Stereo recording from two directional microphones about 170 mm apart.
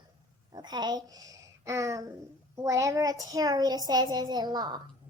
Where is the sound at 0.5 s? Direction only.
25° right (ahead or behind).